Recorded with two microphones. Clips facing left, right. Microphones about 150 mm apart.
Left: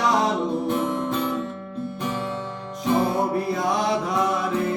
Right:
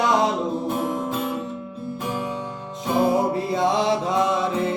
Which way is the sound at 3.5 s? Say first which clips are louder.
Right 2 dB; 25° right (ahead or behind).